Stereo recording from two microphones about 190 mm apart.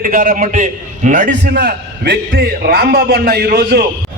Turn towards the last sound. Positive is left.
turn(degrees=-55)  # may be behind; listen again after turning